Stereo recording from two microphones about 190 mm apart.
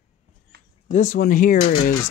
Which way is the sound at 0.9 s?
45° left (ahead or behind).